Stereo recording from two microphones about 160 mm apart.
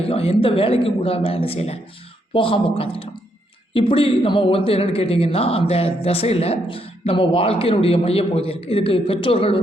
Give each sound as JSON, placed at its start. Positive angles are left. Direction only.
{"t": 0.0, "sound": "a man's voice", "side_deg": 35}